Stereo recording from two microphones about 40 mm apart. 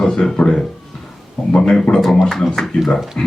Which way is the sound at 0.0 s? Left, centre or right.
Centre.